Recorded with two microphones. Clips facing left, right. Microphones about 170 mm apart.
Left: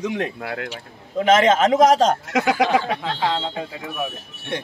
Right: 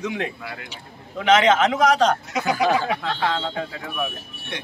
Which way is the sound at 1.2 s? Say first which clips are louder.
Left 1 dB; 45° left (ahead or behind).